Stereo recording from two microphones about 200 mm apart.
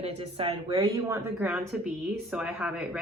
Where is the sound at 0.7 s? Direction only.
15° right (ahead or behind).